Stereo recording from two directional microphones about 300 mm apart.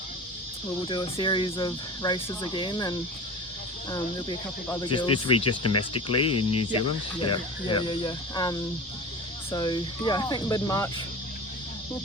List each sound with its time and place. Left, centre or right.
0.9 s speech: centre
5.5 s speech: left
6.7 s speech: centre